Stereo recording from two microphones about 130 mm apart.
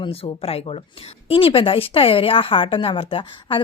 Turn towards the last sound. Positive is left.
turn(degrees=45)  # may be behind; listen again after turning